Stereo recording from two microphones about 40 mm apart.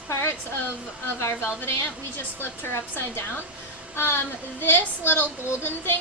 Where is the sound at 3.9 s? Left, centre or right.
Left.